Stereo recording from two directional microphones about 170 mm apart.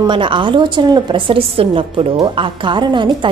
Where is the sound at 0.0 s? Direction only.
30° right (ahead or behind).